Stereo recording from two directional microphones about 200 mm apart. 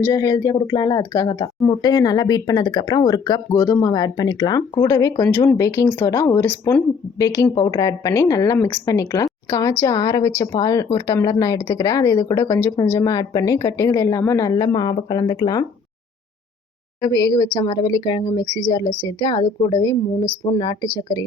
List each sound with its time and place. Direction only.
0.1 s speech: 15° left (ahead or behind)
7.5 s speech: 20° left (ahead or behind)
17.0 s speech: 15° left (ahead or behind)
18.4 s speech: 25° right (ahead or behind)
19.0 s a woman's voice: 20° left (ahead or behind)